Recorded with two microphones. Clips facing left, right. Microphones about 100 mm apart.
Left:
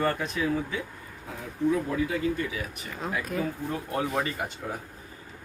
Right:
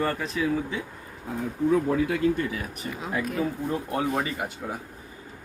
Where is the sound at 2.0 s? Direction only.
65° right (ahead or behind).